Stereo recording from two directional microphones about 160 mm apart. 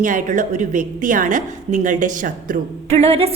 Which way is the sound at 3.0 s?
40° right (ahead or behind).